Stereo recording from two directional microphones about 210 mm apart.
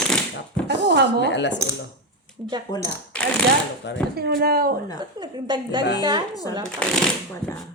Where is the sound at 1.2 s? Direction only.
55° left (ahead or behind).